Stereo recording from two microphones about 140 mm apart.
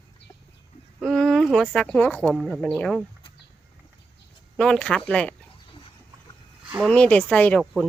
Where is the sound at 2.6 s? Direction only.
10° left (ahead or behind).